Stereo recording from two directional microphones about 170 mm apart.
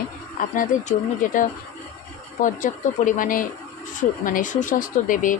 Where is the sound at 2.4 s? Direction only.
50° left (ahead or behind).